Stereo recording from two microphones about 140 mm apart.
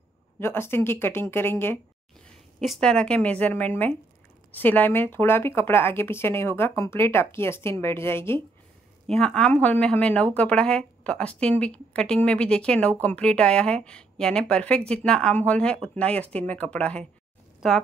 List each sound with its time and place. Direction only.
0.4 s speech: 15° left (ahead or behind)
2.6 s speech: centre (ahead or behind)
9.0 s speech: 5° left (ahead or behind)